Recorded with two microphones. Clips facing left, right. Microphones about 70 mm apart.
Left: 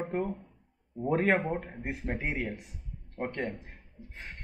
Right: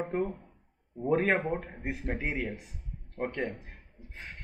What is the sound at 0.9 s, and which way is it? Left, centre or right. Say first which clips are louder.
Speech: even; centre.